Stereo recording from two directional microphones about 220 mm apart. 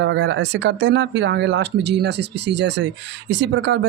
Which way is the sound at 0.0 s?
55° right (ahead or behind).